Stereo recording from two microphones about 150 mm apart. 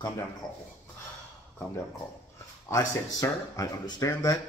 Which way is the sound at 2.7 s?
20° left (ahead or behind).